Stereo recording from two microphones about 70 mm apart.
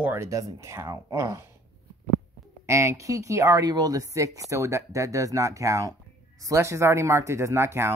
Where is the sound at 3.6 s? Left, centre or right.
Right.